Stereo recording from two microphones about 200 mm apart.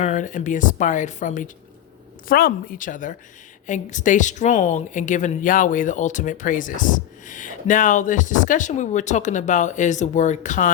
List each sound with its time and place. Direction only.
0.0 s a woman's voice: 40° left (ahead or behind)